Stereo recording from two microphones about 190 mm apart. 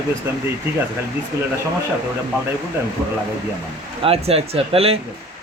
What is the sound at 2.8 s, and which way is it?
Speech, 10° right (ahead or behind).